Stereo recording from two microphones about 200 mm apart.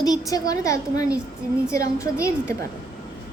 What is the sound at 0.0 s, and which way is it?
A woman's voice, 20° left (ahead or behind).